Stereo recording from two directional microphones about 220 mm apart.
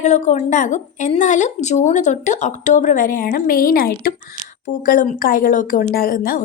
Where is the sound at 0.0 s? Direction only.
30° left (ahead or behind).